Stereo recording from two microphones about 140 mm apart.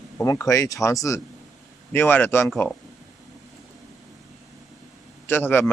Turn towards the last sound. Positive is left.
turn(degrees=15)  # may be behind; listen again after turning